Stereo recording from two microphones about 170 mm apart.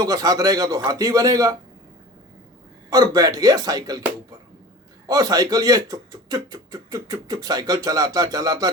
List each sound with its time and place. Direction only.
0.0 s speech: 20° right (ahead or behind)
2.9 s speech: 20° right (ahead or behind)
5.0 s speech: 20° right (ahead or behind)